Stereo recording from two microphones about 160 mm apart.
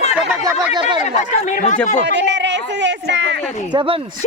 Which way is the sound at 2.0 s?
90° right.